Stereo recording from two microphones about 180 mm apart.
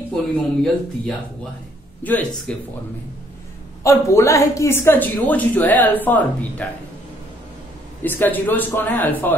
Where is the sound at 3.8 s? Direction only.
15° left (ahead or behind).